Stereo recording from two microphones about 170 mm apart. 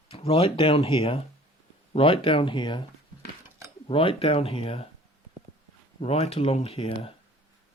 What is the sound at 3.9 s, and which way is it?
Speech, 30° left (ahead or behind).